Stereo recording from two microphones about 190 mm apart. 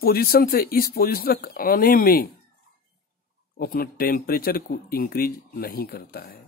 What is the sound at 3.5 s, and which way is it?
Speech, 50° left (ahead or behind).